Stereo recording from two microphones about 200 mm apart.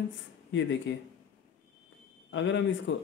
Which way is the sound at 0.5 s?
65° left (ahead or behind).